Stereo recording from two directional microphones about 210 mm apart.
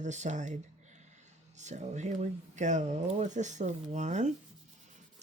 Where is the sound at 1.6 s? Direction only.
35° right (ahead or behind).